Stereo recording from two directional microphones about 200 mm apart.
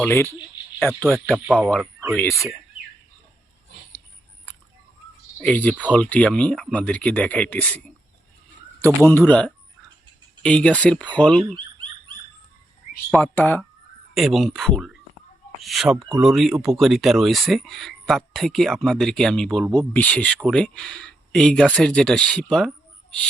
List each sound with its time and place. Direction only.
0.0 s speech: 15° left (ahead or behind)
1.0 s speech: centre (ahead or behind)
1.8 s a sound: 10° right (ahead or behind)
5.4 s speech: 5° left (ahead or behind)
9.0 s speech: 10° left (ahead or behind)
11.5 s bird: 25° right (ahead or behind)
13.1 s speech: centre (ahead or behind)